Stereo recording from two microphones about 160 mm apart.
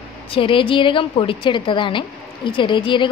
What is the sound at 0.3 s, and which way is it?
A woman's voice, 35° left (ahead or behind).